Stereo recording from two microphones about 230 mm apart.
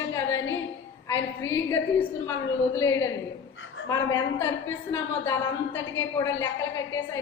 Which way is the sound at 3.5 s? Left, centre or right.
Left.